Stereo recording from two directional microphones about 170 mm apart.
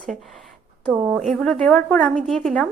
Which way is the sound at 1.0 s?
Centre (ahead or behind).